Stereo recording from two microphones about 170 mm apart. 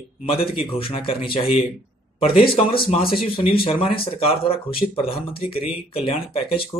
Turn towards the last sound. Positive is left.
turn(degrees=35)  # may be behind; listen again after turning